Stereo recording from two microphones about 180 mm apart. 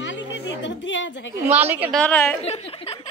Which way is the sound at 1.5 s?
10° right (ahead or behind).